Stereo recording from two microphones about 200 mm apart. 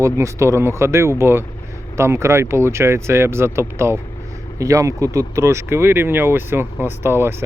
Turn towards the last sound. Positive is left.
turn(degrees=-10)  # may be behind; listen again after turning